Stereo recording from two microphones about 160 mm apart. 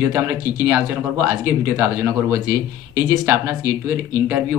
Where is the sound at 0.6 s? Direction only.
15° right (ahead or behind).